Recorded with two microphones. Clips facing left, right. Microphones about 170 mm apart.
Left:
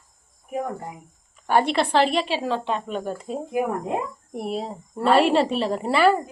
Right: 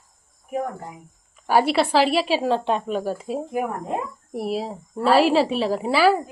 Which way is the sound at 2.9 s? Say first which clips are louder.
Right 3 dB; 5° right (ahead or behind).